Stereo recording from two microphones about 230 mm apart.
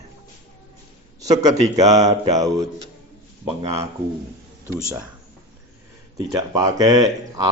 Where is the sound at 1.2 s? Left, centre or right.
Centre.